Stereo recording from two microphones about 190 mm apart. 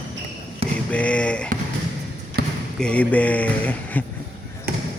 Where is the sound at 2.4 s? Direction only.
55° right (ahead or behind).